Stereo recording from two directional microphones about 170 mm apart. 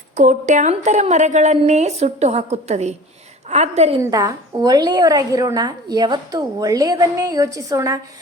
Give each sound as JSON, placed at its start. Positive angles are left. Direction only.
{"t": 0.2, "sound": "a woman's voice", "side_deg": -45}
{"t": 4.0, "sound": "a woman's voice", "side_deg": -20}